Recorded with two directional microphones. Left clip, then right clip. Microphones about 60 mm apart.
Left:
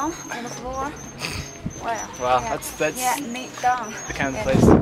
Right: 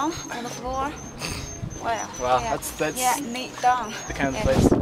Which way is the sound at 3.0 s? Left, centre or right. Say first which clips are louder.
Even; right.